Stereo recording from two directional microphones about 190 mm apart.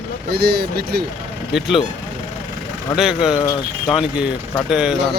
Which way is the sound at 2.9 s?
Centre (ahead or behind).